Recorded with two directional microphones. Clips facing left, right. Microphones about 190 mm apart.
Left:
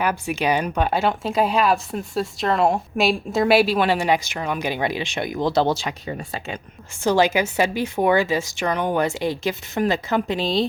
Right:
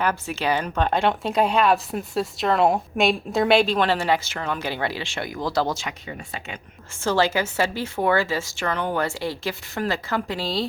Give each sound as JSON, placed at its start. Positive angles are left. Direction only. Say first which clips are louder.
{"t": 0.0, "sound": "speech", "louder": "left 2 dB", "side_deg": 15}
{"t": 7.0, "sound": "speech", "louder": "left 3 dB", "side_deg": 15}